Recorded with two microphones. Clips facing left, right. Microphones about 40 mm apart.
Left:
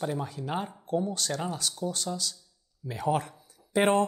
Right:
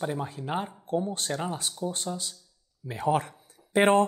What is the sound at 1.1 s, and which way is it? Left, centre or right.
Speech, right.